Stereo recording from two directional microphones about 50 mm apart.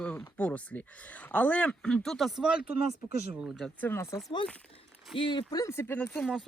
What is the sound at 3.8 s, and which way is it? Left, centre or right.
Speech, left.